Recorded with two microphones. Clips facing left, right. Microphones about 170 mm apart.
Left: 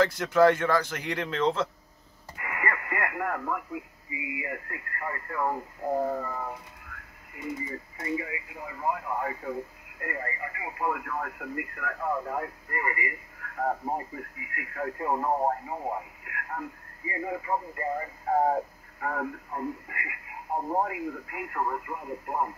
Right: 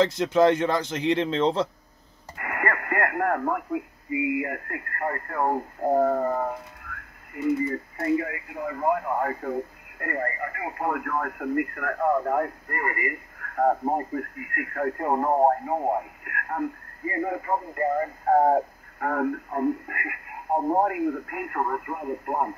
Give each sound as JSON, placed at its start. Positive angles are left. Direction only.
{"t": 0.0, "sound": "speech", "side_deg": -20}
{"t": 2.3, "sound": "speech", "side_deg": -55}